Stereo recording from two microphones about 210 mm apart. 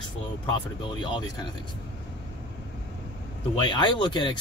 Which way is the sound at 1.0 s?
20° left (ahead or behind).